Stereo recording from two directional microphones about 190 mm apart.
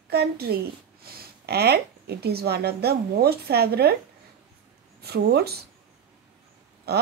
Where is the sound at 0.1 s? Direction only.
55° right (ahead or behind).